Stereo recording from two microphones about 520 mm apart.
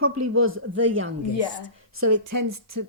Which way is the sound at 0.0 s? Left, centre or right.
Right.